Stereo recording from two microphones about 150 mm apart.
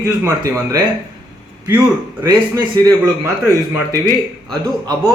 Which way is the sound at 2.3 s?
25° right (ahead or behind).